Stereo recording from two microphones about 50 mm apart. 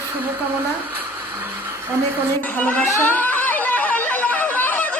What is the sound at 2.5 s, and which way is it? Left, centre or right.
Chatter, left.